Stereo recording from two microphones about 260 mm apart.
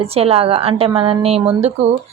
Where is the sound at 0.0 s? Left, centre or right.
Right.